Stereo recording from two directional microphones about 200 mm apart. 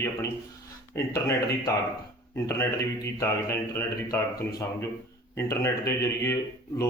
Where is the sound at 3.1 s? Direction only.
15° left (ahead or behind).